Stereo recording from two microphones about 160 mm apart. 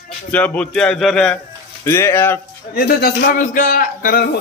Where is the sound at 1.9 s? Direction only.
15° left (ahead or behind).